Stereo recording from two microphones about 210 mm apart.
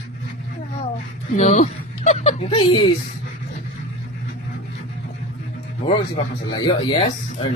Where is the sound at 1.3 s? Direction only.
35° left (ahead or behind).